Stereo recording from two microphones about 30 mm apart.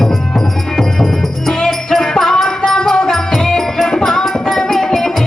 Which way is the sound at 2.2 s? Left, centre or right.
Centre.